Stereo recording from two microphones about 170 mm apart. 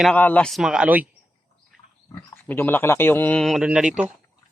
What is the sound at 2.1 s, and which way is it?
Speech, 10° left (ahead or behind).